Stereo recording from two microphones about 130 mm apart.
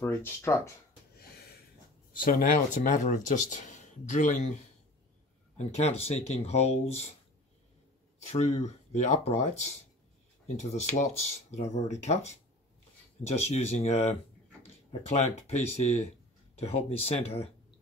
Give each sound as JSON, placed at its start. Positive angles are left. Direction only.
{"t": 0.0, "sound": "speech", "side_deg": 20}
{"t": 2.1, "sound": "speech", "side_deg": 90}
{"t": 5.6, "sound": "speech", "side_deg": 55}
{"t": 8.3, "sound": "speech", "side_deg": 60}
{"t": 13.2, "sound": "speech", "side_deg": 55}